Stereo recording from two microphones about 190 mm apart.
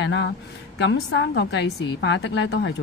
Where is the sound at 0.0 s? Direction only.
70° left (ahead or behind).